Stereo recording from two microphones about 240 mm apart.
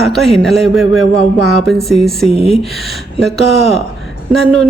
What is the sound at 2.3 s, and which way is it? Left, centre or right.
Speech, left.